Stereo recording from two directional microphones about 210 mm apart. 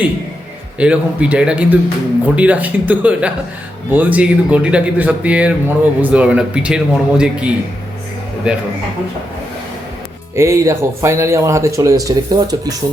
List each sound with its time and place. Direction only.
0.8 s speech: 5° right (ahead or behind)
10.3 s speech: 15° right (ahead or behind)